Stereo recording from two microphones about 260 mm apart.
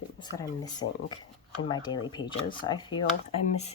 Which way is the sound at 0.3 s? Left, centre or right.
Centre.